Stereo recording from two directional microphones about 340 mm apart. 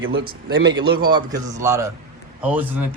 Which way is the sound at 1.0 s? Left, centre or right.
Centre.